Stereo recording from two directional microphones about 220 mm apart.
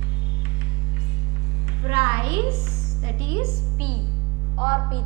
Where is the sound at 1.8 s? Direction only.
10° right (ahead or behind).